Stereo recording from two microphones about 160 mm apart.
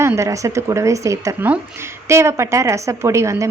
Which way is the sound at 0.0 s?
15° right (ahead or behind).